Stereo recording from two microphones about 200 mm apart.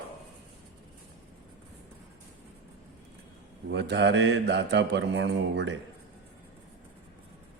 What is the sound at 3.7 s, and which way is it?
A man's voice, 60° right (ahead or behind).